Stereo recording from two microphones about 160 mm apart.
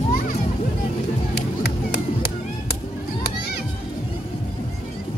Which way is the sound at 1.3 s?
90° left.